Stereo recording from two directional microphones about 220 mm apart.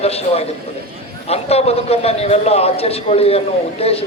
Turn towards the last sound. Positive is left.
turn(degrees=25)  # may be behind; listen again after turning